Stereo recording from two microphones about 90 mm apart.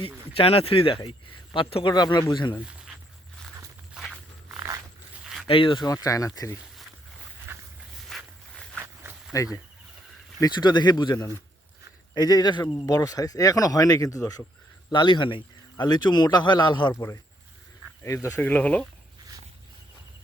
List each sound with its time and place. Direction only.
0.0 s a man's voice: 90° left
1.9 s speech: 50° left (ahead or behind)
5.2 s zipper: 5° right (ahead or behind)
5.5 s a man's voice: 75° left (ahead or behind)
5.8 s speech: 40° left (ahead or behind)
7.5 s walk: 25° right (ahead or behind)
8.1 s walk: 5° left (ahead or behind)
9.3 s speech: 35° left (ahead or behind)
10.4 s speech: 55° left (ahead or behind)
12.1 s speech: 50° left (ahead or behind)
14.9 s speech: 65° left (ahead or behind)
16.9 s speech: 30° left (ahead or behind)
18.3 s speech: 15° left (ahead or behind)